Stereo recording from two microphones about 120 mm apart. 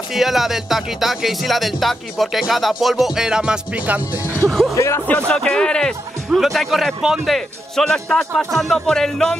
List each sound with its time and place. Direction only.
0.1 s speech: centre (ahead or behind)
4.5 s speech: centre (ahead or behind)
4.7 s speech: 25° left (ahead or behind)
5.0 s speech: 10° left (ahead or behind)